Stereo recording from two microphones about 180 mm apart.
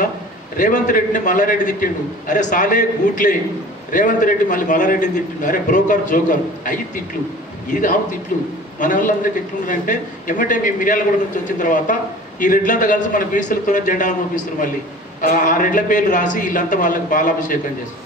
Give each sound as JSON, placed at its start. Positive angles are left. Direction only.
{"t": 0.6, "sound": "a man's voice", "side_deg": 50}
{"t": 15.2, "sound": "a man's voice", "side_deg": 45}